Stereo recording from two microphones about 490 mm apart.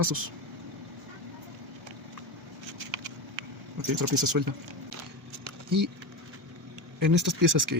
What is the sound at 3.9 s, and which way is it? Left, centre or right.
Speech, right.